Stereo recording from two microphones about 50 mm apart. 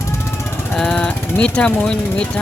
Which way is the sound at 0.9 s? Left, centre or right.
Left.